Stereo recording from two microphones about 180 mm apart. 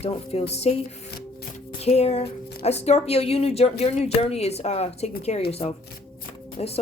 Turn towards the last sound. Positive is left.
turn(degrees=35)  # may be behind; listen again after turning